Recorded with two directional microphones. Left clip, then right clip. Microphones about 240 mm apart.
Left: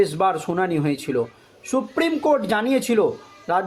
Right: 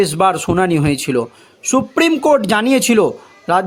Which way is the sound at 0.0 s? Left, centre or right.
Right.